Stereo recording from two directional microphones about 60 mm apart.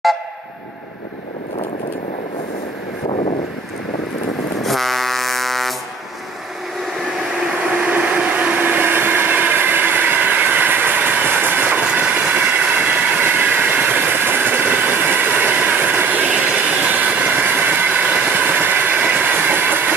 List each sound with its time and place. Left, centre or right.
4.6 s air horn: centre
7.9 s train: right